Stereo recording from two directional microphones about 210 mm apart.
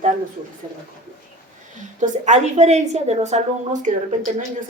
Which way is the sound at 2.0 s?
35° right (ahead or behind).